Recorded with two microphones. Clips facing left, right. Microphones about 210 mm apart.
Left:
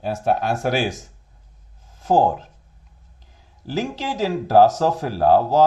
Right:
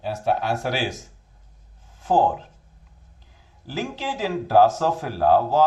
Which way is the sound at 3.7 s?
40° left (ahead or behind).